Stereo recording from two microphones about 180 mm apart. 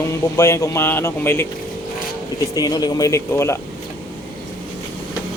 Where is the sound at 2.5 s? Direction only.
20° left (ahead or behind).